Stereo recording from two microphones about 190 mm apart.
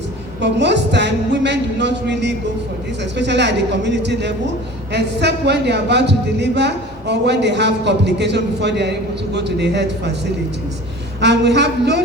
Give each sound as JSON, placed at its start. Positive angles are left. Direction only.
{"t": 0.4, "sound": "a man's voice", "side_deg": -65}
{"t": 11.2, "sound": "a man's voice", "side_deg": -65}